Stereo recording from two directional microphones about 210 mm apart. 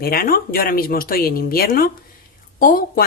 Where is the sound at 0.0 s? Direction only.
45° left (ahead or behind).